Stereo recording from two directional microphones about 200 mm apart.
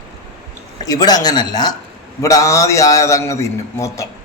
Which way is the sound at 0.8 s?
20° left (ahead or behind).